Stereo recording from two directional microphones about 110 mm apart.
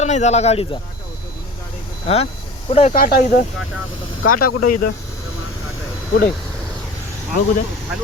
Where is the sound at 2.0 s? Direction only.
65° left (ahead or behind).